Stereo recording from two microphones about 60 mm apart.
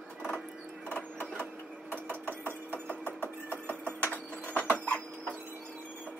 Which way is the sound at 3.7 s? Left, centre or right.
Right.